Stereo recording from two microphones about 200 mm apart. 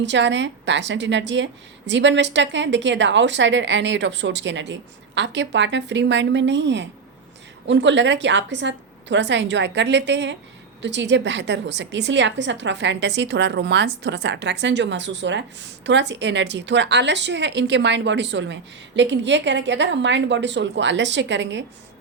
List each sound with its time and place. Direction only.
0.0 s a woman's voice: 65° right (ahead or behind)